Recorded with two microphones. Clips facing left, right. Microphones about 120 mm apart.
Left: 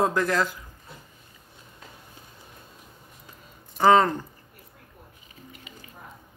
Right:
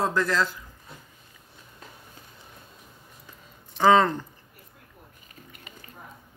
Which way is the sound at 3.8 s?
10° left (ahead or behind).